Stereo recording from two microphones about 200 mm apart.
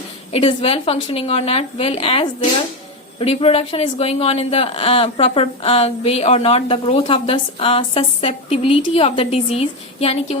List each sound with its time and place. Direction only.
0.3 s speech: 30° left (ahead or behind)